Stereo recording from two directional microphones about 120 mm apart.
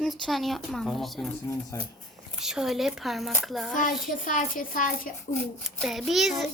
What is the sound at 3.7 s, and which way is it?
Speech, 90° left.